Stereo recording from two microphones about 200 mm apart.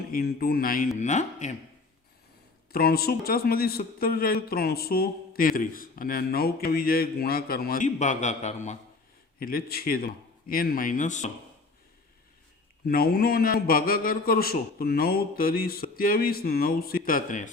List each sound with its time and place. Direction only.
0.1 s a man's voice: 50° left (ahead or behind)
2.7 s a man's voice: 50° left (ahead or behind)
9.4 s a man's voice: 50° left (ahead or behind)
12.8 s a man's voice: 50° left (ahead or behind)